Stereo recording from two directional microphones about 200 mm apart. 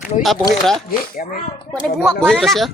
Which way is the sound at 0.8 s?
45° left (ahead or behind).